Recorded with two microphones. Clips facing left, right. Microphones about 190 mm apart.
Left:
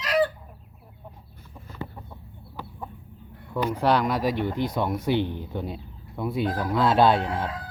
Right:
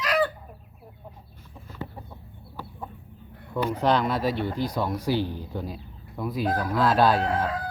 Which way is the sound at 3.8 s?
10° left (ahead or behind).